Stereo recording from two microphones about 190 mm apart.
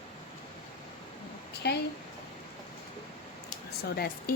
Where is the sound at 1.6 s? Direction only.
60° left (ahead or behind).